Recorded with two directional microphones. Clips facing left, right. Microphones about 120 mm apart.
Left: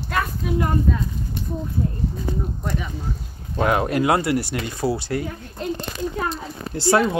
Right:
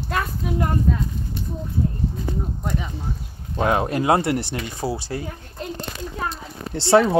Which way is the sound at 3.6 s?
25° right (ahead or behind).